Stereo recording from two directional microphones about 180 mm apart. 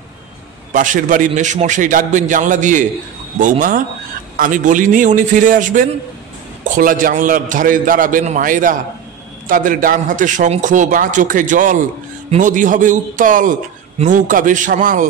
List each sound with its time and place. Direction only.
0.7 s a man's voice: 45° right (ahead or behind)